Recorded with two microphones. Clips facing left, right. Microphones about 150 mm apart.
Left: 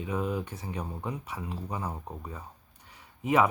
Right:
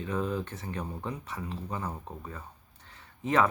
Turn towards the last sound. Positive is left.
turn(degrees=10)  # may be behind; listen again after turning